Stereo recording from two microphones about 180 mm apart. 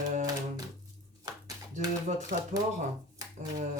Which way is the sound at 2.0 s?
40° right (ahead or behind).